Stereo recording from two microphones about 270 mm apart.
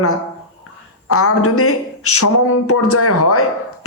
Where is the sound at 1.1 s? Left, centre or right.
Left.